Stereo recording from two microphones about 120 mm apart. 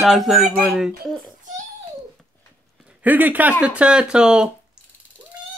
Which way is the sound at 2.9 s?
10° right (ahead or behind).